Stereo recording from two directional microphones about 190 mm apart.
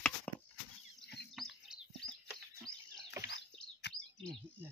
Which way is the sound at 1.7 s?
5° right (ahead or behind).